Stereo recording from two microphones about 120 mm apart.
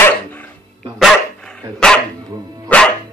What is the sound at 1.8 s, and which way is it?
Dog, 5° left (ahead or behind).